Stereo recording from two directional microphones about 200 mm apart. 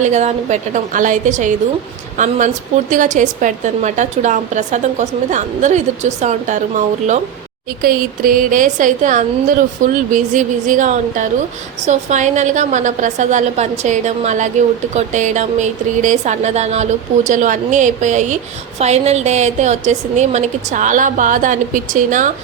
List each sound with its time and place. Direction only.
0.0 s a woman's voice: 35° right (ahead or behind)